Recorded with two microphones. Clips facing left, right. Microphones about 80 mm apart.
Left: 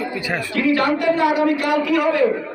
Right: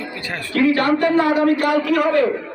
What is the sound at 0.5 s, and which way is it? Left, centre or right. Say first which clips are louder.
A man's voice: right 2 dB; right.